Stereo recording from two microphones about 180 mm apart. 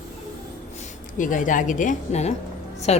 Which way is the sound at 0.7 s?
45° left (ahead or behind).